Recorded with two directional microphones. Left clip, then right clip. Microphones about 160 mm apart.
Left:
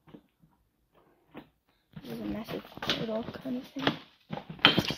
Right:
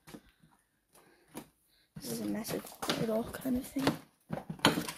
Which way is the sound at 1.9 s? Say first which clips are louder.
Even; 15° right (ahead or behind).